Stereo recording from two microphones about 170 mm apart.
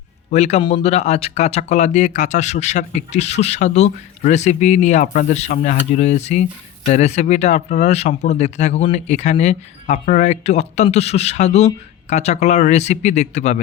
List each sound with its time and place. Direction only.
0.3 s speech: 40° left (ahead or behind)